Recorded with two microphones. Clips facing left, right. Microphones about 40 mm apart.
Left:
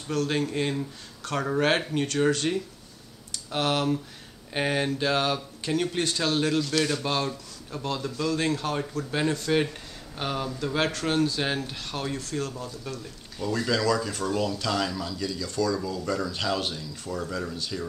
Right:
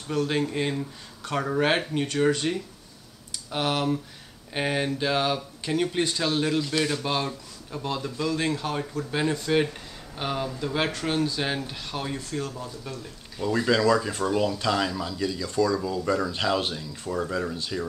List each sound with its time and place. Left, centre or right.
0.1 s speech: centre
13.4 s speech: centre